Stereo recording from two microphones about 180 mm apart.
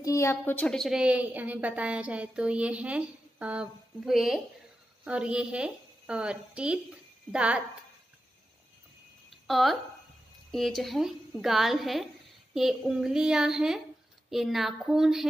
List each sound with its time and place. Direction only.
0.0 s a woman's voice: 15° left (ahead or behind); by 7.6 s 5° right (ahead or behind)
9.5 s a woman's voice: centre (ahead or behind)